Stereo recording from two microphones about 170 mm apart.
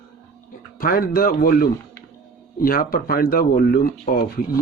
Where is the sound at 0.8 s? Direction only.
60° left (ahead or behind).